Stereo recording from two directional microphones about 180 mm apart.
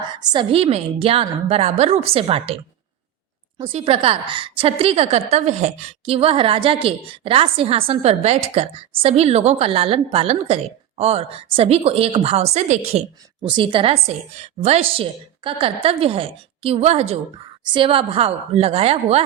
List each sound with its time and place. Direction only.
0.0 s a woman's voice: 25° right (ahead or behind)
3.6 s a woman's voice: 35° right (ahead or behind)